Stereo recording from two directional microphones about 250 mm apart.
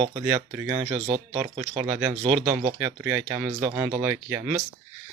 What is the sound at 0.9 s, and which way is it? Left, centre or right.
Speech, right.